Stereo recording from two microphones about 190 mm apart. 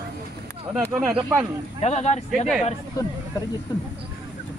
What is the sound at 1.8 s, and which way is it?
Speech, 35° left (ahead or behind).